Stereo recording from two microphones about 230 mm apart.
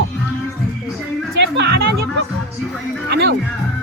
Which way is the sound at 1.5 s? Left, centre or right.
Right.